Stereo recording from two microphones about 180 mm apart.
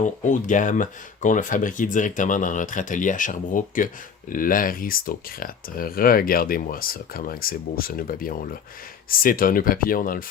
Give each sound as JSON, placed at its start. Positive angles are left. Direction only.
{"t": 0.0, "sound": "speech", "side_deg": 45}